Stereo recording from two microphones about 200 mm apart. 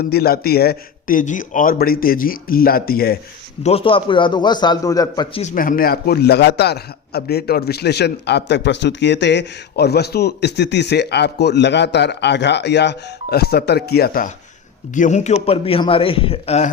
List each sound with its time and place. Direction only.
0.1 s speech: 50° left (ahead or behind)
3.6 s a man's voice: 30° left (ahead or behind)